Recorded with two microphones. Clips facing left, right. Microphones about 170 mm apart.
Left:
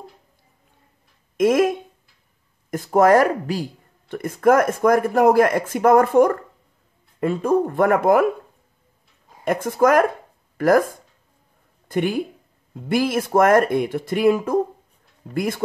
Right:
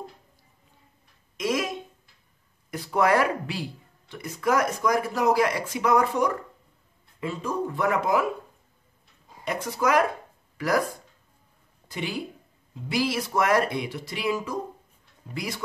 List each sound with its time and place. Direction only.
1.3 s speech: 55° left (ahead or behind)
9.4 s speech: 50° left (ahead or behind)
11.9 s speech: 50° left (ahead or behind)